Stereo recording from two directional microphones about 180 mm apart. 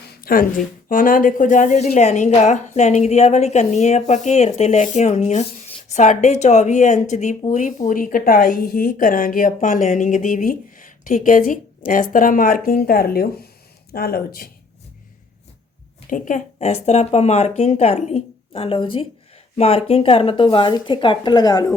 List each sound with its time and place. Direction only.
0.1 s speech: 55° left (ahead or behind)
16.0 s speech: 45° left (ahead or behind); by 21.7 s 20° left (ahead or behind)